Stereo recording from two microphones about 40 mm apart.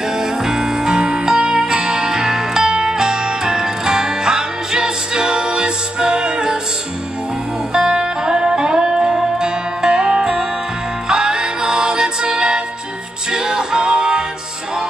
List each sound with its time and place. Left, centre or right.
0.2 s music: centre
1.3 s music: right
7.7 s music: right